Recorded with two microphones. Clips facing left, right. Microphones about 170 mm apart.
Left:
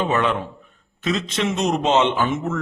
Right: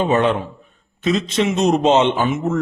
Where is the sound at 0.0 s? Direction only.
25° right (ahead or behind).